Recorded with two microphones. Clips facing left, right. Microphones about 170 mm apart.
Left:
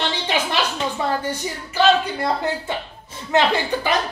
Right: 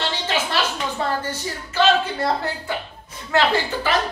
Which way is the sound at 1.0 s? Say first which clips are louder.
Left 1 dB; 15° left (ahead or behind).